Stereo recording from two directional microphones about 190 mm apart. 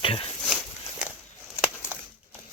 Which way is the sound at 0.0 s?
30° left (ahead or behind).